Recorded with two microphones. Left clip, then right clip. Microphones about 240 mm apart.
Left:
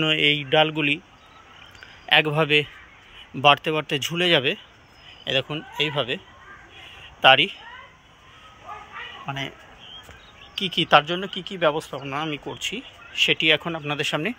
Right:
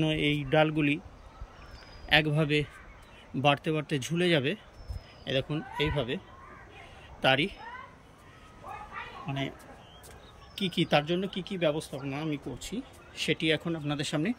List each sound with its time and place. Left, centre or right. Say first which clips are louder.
0.0 s speech: left 9 dB; centre
2.0 s speech: left 7 dB; centre
7.0 s a sound: left 10 dB; centre
9.3 s a man's voice: left 6 dB; left
10.6 s speech: left 9 dB; centre